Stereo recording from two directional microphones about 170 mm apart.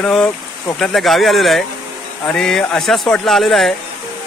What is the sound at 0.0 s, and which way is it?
Speech, 5° left (ahead or behind).